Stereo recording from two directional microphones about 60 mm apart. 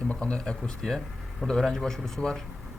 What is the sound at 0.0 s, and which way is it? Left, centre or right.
A man's voice, centre.